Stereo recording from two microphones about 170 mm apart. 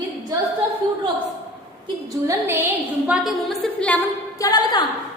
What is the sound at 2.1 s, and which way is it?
Speech, 15° right (ahead or behind).